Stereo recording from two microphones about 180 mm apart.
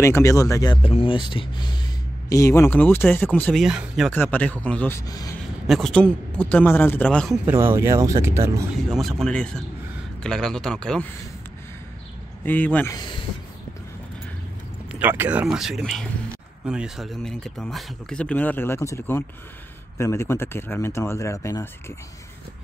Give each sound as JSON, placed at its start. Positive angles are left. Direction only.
{"t": 0.0, "sound": "speech", "side_deg": 15}
{"t": 0.8, "sound": "speech", "side_deg": 30}
{"t": 3.6, "sound": "speech", "side_deg": -5}
{"t": 4.1, "sound": "speech", "side_deg": 10}
{"t": 5.7, "sound": "speech", "side_deg": 5}
{"t": 7.4, "sound": "speech", "side_deg": -15}
{"t": 8.9, "sound": "speech", "side_deg": 0}
{"t": 12.4, "sound": "speech", "side_deg": 10}
{"t": 12.9, "sound": "speech", "side_deg": 25}
{"t": 14.9, "sound": "speech", "side_deg": -10}